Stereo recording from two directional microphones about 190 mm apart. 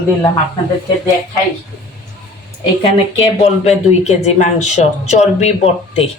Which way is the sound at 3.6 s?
35° left (ahead or behind).